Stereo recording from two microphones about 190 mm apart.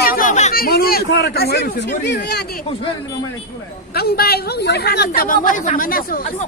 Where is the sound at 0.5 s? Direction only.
50° left (ahead or behind).